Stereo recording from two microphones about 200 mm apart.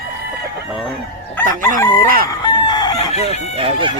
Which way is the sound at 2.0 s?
45° right (ahead or behind).